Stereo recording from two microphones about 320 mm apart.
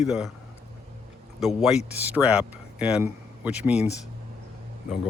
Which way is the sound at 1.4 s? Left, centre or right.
Centre.